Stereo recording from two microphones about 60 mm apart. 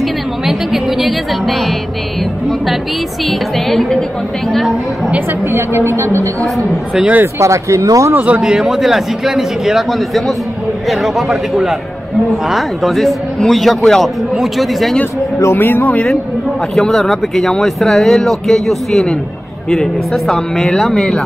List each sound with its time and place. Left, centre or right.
0.5 s speech: centre
3.3 s speech: centre
5.5 s a woman's voice: right
7.0 s speech: right
7.3 s speech: right
8.1 s speech: right
8.4 s speech: centre
15.5 s speech: left
16.7 s speech: centre